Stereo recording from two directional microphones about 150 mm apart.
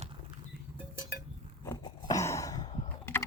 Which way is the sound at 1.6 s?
25° left (ahead or behind).